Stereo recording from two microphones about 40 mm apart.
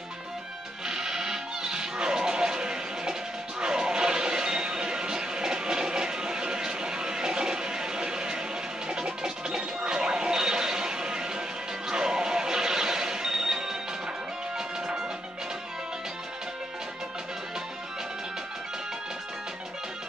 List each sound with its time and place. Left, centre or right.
0.8 s music: centre
3.6 s a sound: centre
8.8 s music: centre